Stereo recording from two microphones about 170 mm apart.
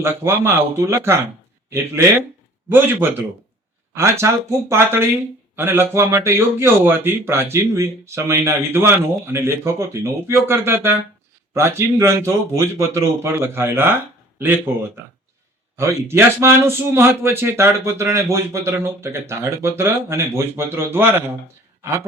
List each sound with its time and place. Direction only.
0.0 s a man's voice: 15° right (ahead or behind)
2.6 s a man's voice: 10° right (ahead or behind)
15.7 s a man's voice: 15° right (ahead or behind)